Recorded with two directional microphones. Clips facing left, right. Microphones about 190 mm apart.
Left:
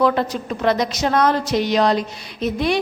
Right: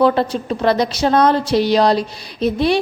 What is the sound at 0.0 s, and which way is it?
A woman's voice, 30° right (ahead or behind).